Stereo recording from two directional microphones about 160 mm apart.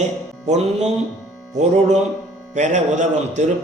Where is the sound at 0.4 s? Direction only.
45° right (ahead or behind).